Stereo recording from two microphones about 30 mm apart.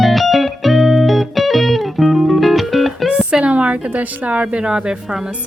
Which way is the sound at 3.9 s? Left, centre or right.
Right.